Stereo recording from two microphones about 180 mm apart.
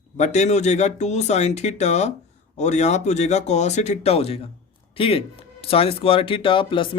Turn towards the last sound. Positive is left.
turn(degrees=30)  # may be behind; listen again after turning